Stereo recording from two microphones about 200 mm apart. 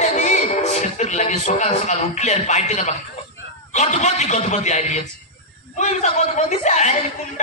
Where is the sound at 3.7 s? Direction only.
35° left (ahead or behind).